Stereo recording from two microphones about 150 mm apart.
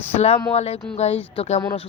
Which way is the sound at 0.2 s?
45° left (ahead or behind).